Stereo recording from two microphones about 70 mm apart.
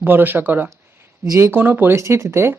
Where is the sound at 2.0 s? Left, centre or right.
Right.